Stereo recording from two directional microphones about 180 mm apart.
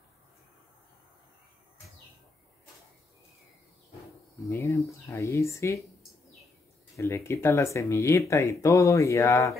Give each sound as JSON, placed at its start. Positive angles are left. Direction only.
{"t": 4.5, "sound": "speech", "side_deg": 15}
{"t": 7.0, "sound": "speech", "side_deg": 15}